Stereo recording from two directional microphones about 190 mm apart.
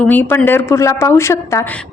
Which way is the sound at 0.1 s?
10° left (ahead or behind).